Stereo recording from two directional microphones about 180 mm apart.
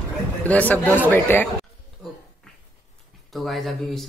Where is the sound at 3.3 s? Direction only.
Centre (ahead or behind).